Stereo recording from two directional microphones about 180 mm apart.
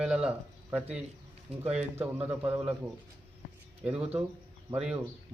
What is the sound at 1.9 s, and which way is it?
Speech, 10° right (ahead or behind).